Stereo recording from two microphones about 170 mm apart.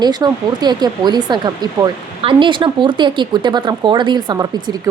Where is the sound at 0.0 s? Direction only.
25° right (ahead or behind).